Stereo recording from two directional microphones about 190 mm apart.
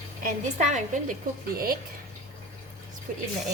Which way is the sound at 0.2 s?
40° right (ahead or behind).